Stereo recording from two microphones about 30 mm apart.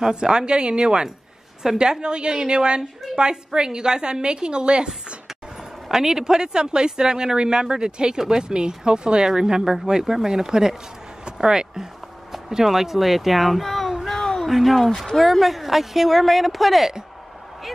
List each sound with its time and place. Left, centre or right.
0.1 s a woman's voice: right
5.6 s a woman's voice: centre; by 10.0 s right
10.2 s speech: centre
11.8 s a sound: centre
14.5 s a woman's voice: centre